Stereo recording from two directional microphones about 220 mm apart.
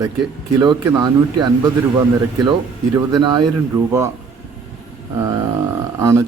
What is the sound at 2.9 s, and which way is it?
Speech, 20° right (ahead or behind).